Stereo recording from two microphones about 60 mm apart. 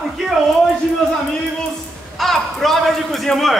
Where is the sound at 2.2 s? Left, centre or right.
Centre.